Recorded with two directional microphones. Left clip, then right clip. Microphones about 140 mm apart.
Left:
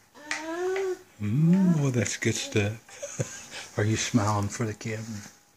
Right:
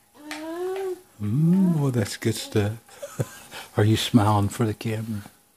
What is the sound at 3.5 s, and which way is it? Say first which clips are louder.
Speech: right 5 dB; 70° right (ahead or behind).